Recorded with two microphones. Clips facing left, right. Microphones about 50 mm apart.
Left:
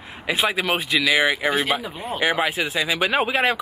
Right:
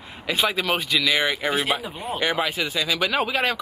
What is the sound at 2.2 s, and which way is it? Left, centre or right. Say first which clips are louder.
Speech: left 3 dB; centre.